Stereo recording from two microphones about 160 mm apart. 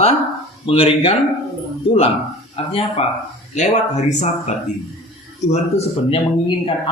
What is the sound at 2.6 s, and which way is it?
A man's voice, 35° left (ahead or behind).